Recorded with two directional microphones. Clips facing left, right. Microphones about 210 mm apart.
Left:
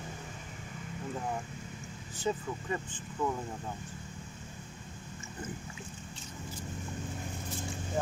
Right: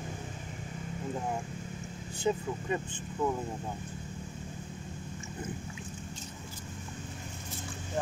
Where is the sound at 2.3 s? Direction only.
15° right (ahead or behind).